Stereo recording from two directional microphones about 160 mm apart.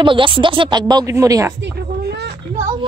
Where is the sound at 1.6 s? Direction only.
90° right.